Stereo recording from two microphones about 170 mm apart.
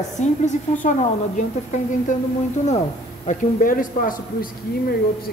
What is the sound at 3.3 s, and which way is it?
A woman's voice, 50° left (ahead or behind).